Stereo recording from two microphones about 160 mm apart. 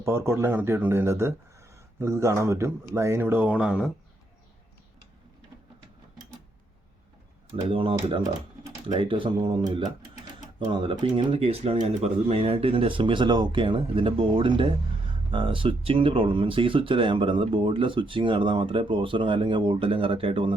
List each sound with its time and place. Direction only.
0.0 s speech: 15° right (ahead or behind)
7.5 s speech: 35° right (ahead or behind)